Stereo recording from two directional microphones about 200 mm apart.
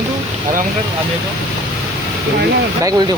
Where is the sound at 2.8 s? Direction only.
15° right (ahead or behind).